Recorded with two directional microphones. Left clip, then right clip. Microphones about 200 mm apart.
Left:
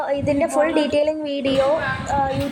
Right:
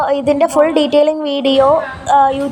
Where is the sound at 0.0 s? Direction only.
15° right (ahead or behind).